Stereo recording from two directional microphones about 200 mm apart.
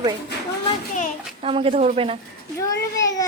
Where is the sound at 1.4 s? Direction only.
30° right (ahead or behind).